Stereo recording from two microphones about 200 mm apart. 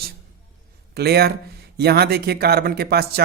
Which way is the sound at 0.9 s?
55° right (ahead or behind).